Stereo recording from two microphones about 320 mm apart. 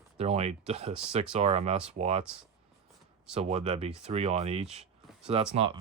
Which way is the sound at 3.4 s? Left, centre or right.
Centre.